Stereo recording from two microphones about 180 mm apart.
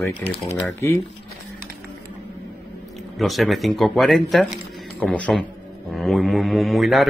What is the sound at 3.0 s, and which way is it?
A man's voice, centre (ahead or behind).